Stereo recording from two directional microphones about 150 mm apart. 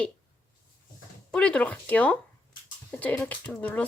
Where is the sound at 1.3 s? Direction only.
5° left (ahead or behind).